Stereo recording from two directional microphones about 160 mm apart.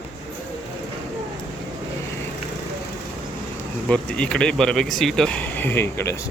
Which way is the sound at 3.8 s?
5° left (ahead or behind).